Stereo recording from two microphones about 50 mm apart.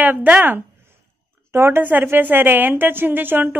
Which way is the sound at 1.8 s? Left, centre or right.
Right.